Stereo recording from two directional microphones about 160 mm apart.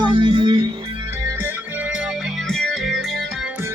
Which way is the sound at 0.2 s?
30° right (ahead or behind).